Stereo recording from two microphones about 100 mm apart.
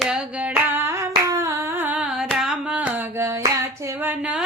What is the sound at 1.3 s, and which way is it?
Humming, 35° right (ahead or behind).